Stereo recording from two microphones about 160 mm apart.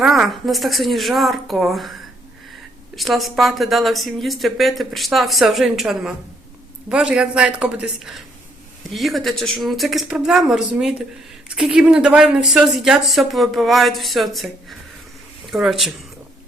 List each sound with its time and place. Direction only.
0.0 s speech: centre (ahead or behind)